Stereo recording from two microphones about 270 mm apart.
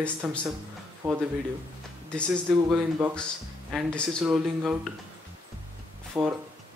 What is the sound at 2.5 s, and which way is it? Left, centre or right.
Speech, centre.